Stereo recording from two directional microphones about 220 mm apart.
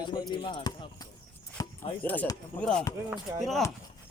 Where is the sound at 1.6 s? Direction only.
15° left (ahead or behind).